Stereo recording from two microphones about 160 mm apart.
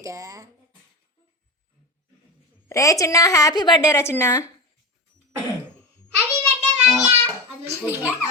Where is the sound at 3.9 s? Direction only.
15° left (ahead or behind).